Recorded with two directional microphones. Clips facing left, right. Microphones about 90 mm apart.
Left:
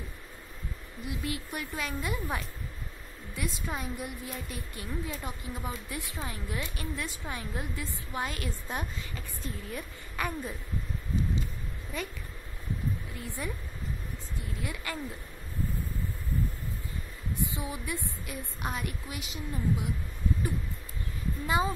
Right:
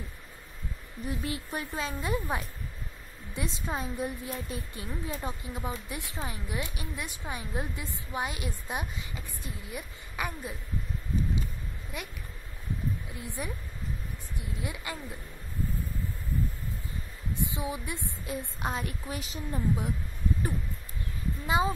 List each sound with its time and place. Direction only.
1.2 s a woman's voice: 30° right (ahead or behind)
13.4 s a woman's voice: 20° right (ahead or behind)
17.3 s a woman's voice: 20° right (ahead or behind)
21.5 s a woman's voice: 20° right (ahead or behind)